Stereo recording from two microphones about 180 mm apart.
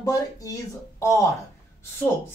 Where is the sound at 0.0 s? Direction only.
20° left (ahead or behind).